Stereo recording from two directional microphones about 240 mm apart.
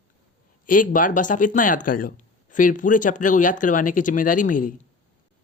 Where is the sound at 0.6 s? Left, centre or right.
Left.